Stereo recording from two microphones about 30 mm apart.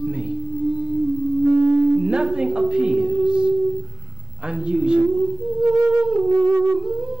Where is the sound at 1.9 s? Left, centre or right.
Right.